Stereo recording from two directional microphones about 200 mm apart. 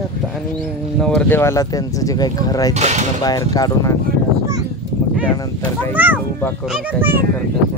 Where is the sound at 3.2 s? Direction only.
20° left (ahead or behind).